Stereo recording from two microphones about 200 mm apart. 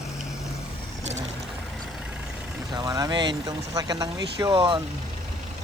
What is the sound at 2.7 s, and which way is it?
Speech, 20° right (ahead or behind).